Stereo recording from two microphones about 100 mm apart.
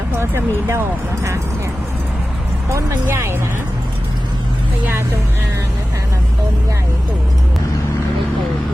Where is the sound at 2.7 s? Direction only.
30° right (ahead or behind).